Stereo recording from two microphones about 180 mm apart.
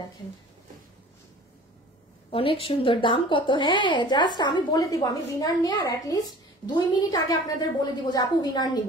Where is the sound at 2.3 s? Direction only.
30° left (ahead or behind).